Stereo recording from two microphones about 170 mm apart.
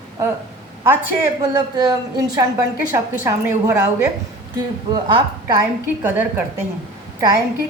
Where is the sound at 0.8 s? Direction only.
20° right (ahead or behind).